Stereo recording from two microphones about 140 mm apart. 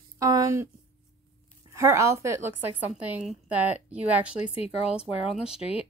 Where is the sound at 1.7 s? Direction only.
20° right (ahead or behind); by 5.6 s 5° right (ahead or behind).